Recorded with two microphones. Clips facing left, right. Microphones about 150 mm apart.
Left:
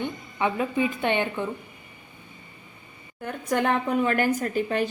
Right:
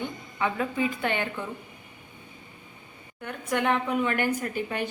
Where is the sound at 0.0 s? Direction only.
20° left (ahead or behind).